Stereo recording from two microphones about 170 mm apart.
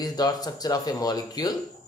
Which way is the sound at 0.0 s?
20° left (ahead or behind).